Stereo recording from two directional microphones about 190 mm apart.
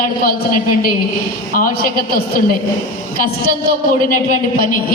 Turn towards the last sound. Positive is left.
turn(degrees=45)  # may be behind; listen again after turning